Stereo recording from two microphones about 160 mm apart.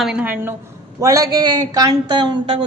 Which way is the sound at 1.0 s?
20° right (ahead or behind).